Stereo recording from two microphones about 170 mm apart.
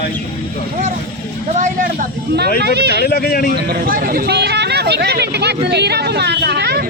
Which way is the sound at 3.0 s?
65° left (ahead or behind).